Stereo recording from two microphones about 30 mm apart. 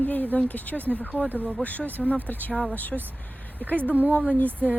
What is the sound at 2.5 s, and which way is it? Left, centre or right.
Speech, left.